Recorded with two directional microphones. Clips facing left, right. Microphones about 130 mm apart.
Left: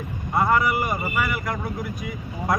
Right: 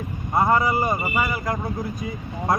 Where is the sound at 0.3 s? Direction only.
25° right (ahead or behind).